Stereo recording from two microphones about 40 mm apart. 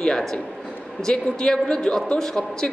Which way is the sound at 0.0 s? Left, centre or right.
Centre.